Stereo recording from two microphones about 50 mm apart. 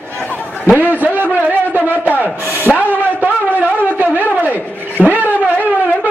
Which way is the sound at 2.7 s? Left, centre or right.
Left.